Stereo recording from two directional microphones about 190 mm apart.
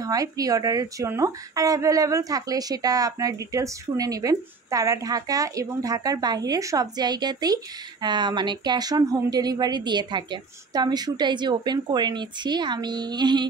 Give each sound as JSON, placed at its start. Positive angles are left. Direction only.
{"t": 0.0, "sound": "a woman's voice", "side_deg": -20}